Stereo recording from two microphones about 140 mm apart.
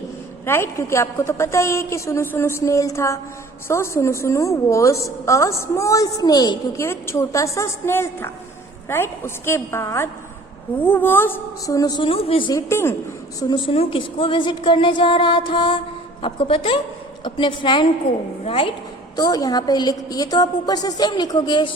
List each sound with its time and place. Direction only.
0.4 s a woman's voice: 15° left (ahead or behind)
12.0 s a woman's voice: 40° left (ahead or behind)
12.5 s a woman's voice: 20° left (ahead or behind)
13.5 s a woman's voice: 40° left (ahead or behind)
19.1 s a woman's voice: 30° left (ahead or behind)